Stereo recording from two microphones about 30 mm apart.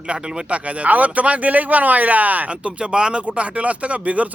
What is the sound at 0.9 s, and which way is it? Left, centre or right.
Speech, right.